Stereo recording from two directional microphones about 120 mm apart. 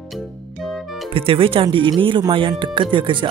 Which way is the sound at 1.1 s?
50° right (ahead or behind).